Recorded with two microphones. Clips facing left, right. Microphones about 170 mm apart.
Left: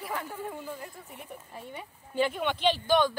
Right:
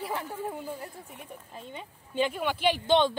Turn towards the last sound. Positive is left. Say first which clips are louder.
# right 1 dB
turn(degrees=-25)  # may be behind; listen again after turning